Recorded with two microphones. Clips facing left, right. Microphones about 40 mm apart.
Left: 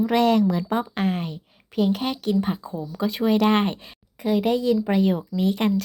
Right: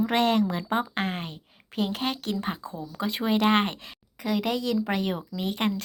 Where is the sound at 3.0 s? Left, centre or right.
Right.